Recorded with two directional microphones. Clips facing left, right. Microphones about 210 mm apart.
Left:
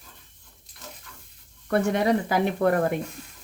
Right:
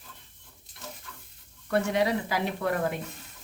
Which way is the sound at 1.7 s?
50° left (ahead or behind).